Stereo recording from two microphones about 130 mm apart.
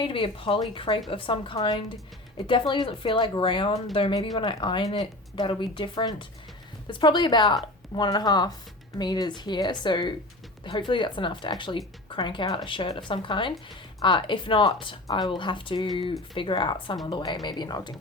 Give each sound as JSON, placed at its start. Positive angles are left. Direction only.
{"t": 0.0, "sound": "speech", "side_deg": 45}